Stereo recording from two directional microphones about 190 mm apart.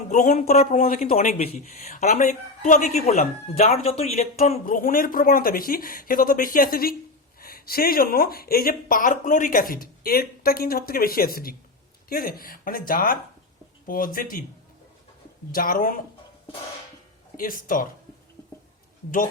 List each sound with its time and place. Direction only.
0.1 s a woman's voice: 40° left (ahead or behind)
1.1 s a woman's voice: 35° left (ahead or behind)
15.5 s speech: 50° left (ahead or behind)
17.3 s speech: 45° left (ahead or behind)